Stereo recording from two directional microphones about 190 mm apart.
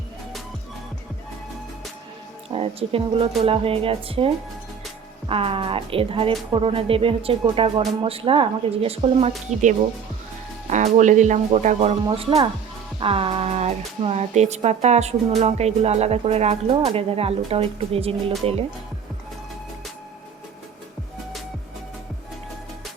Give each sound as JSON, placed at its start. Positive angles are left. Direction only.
{"t": 2.5, "sound": "speech", "side_deg": -30}
{"t": 5.3, "sound": "speech", "side_deg": -30}